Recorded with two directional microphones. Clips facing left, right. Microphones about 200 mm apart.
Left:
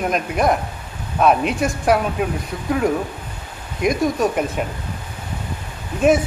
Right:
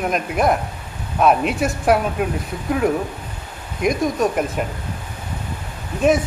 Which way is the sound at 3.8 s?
Centre (ahead or behind).